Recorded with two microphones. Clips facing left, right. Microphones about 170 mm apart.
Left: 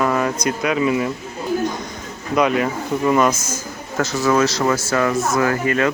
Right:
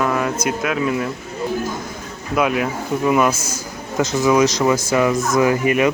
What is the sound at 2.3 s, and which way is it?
Speech, 5° right (ahead or behind).